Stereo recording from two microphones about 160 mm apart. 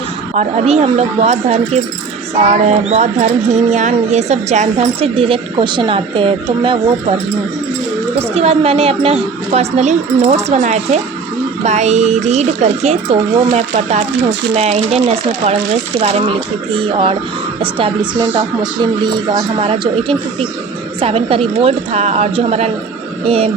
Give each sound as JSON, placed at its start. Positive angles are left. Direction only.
{"t": 0.3, "sound": "speech", "side_deg": -40}
{"t": 8.4, "sound": "a man's voice", "side_deg": -40}